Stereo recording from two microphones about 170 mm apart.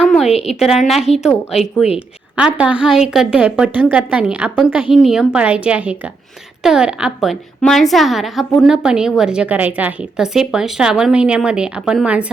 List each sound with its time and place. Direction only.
0.3 s a woman's voice: 35° left (ahead or behind)
0.6 s a woman's voice: centre (ahead or behind)
2.3 s a woman's voice: 5° right (ahead or behind)